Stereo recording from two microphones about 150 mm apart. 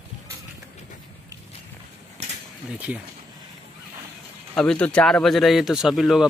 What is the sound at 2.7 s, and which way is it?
Speech, 10° right (ahead or behind).